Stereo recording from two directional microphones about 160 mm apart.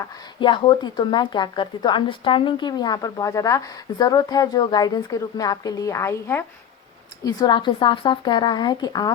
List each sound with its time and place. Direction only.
0.3 s speech: 30° left (ahead or behind)